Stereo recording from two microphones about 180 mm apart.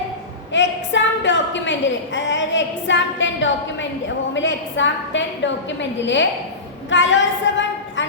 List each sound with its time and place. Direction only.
0.5 s a woman's voice: 90° left